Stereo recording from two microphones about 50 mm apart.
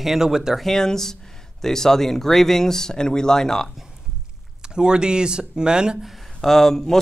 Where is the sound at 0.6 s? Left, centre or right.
Centre.